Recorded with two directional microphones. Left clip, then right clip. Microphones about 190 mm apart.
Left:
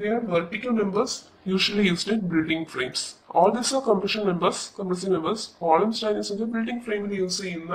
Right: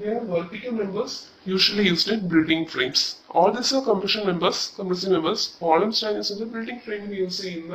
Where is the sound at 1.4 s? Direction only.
15° left (ahead or behind).